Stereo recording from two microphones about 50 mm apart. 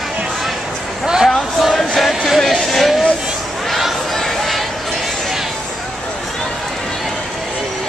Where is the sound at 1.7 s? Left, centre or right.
Centre.